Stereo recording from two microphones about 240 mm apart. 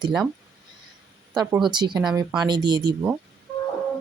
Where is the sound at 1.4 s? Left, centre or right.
Centre.